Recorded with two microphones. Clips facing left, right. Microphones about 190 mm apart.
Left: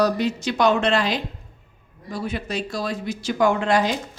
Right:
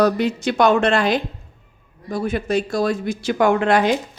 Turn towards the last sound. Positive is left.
turn(degrees=-60)  # may be behind; listen again after turning